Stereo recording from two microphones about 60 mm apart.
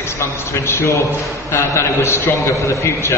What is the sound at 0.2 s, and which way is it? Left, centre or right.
A man's voice, left.